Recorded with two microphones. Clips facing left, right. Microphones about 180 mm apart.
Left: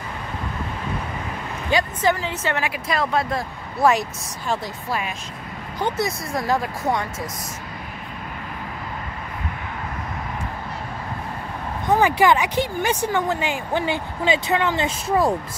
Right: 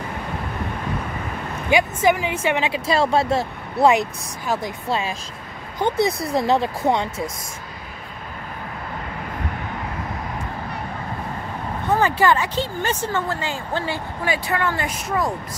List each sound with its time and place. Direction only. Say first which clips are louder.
2.0 s a woman's voice: right 3 dB; 10° right (ahead or behind)
5.8 s speech: right 4 dB; 60° right (ahead or behind)
6.3 s a woman's voice: right 2 dB; 25° right (ahead or behind)
11.9 s speech: left 1 dB; 15° left (ahead or behind); by 15.3 s 30° left (ahead or behind)